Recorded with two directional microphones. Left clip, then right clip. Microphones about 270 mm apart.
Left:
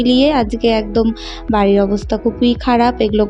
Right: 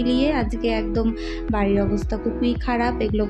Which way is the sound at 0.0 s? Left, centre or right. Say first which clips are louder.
Left 8 dB; left.